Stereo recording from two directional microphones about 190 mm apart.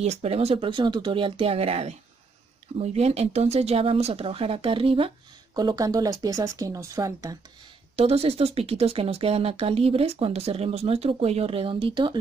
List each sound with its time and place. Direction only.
0.0 s speech: 35° right (ahead or behind); by 7.3 s 15° right (ahead or behind)
7.9 s speech: 30° right (ahead or behind)